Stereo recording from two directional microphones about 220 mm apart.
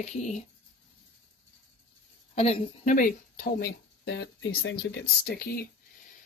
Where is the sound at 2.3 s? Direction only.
30° left (ahead or behind); by 5.5 s 45° left (ahead or behind).